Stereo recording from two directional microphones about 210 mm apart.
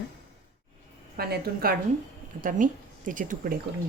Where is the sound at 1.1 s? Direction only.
45° right (ahead or behind).